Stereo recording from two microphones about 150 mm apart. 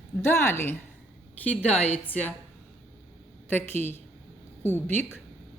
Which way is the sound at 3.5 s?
15° left (ahead or behind).